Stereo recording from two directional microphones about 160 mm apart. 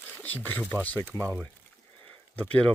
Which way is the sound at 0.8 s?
10° left (ahead or behind).